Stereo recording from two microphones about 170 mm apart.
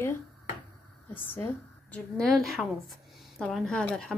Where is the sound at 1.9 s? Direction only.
5° left (ahead or behind).